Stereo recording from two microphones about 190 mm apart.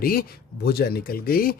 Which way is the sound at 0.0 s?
50° left (ahead or behind).